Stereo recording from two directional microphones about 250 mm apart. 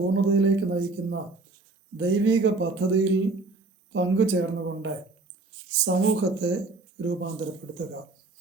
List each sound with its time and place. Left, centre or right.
0.1 s speech: right